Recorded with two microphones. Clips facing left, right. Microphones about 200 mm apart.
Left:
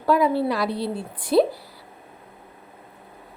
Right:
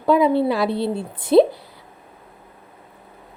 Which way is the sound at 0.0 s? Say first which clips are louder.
Right 4 dB; 25° right (ahead or behind).